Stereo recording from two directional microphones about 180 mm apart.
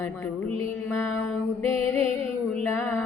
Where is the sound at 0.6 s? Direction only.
10° left (ahead or behind).